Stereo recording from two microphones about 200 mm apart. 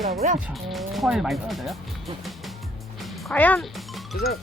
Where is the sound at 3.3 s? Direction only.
10° left (ahead or behind).